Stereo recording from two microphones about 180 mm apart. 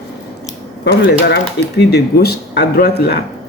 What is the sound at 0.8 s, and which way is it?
Speech, 65° left (ahead or behind).